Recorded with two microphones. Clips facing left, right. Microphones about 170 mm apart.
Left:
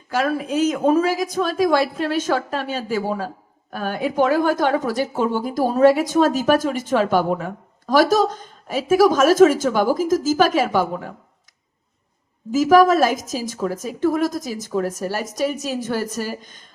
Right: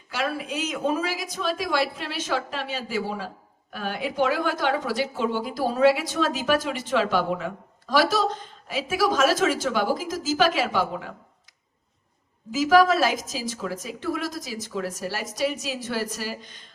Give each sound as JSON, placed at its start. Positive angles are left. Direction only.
{"t": 0.1, "sound": "speech", "side_deg": 45}
{"t": 12.5, "sound": "speech", "side_deg": 45}